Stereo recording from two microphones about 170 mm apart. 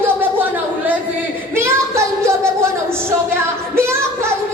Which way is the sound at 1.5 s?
15° right (ahead or behind).